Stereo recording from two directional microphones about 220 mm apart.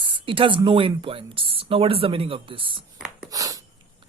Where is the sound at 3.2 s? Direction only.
15° right (ahead or behind).